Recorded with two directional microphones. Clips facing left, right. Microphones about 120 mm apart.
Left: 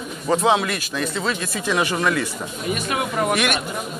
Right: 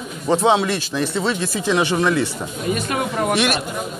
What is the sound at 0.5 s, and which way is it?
Speech, 30° right (ahead or behind).